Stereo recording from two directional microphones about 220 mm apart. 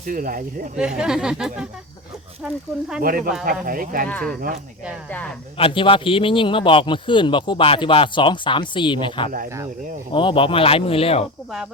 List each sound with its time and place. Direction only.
0.0 s speech: 40° right (ahead or behind)
0.8 s speech: 5° right (ahead or behind)
3.0 s speech: 40° right (ahead or behind)
4.1 s speech: 5° left (ahead or behind)
5.5 s a man's voice: 25° left (ahead or behind)